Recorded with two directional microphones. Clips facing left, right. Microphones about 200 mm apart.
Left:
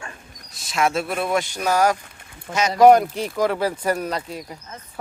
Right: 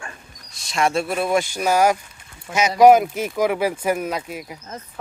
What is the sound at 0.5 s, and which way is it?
Speech, centre (ahead or behind).